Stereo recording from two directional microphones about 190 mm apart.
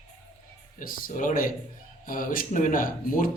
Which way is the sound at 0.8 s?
45° left (ahead or behind).